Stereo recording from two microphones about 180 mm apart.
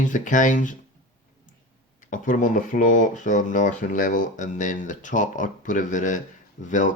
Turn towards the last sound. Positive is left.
turn(degrees=45)  # may be behind; listen again after turning